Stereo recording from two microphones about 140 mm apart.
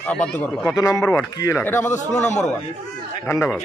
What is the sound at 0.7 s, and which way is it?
Speech, 25° left (ahead or behind).